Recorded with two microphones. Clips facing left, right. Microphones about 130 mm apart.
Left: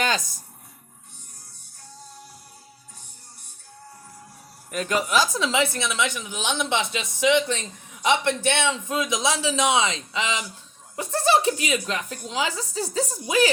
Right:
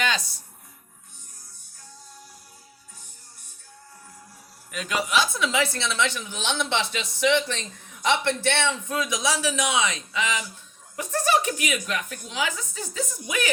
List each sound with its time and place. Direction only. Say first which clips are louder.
0.0 s speech: left 2 dB; 45° left (ahead or behind)
4.7 s speech: left 2 dB; 45° left (ahead or behind)
5.4 s speech: left 1 dB; 30° left (ahead or behind)
5.7 s a woman's voice: even; 15° left (ahead or behind); by 13.5 s 30° left (ahead or behind)